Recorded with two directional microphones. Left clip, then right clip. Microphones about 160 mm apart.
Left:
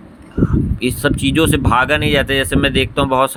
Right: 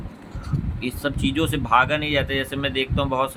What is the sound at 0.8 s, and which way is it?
Speech, 55° left (ahead or behind).